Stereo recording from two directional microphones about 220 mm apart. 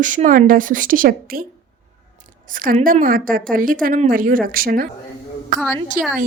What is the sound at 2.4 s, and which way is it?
A woman's voice, 40° right (ahead or behind).